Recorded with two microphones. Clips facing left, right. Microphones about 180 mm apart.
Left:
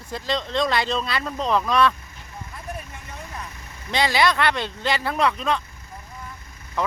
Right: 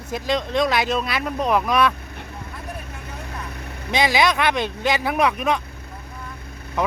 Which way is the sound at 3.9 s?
15° right (ahead or behind).